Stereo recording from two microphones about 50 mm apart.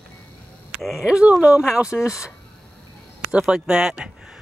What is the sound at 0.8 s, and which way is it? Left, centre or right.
Speech, centre.